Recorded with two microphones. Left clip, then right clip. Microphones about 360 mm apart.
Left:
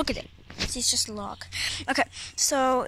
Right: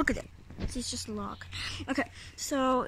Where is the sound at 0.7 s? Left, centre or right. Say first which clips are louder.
Left 9 dB; centre.